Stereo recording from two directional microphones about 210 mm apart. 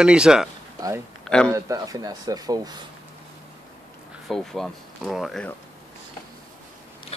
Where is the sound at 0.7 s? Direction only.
15° right (ahead or behind).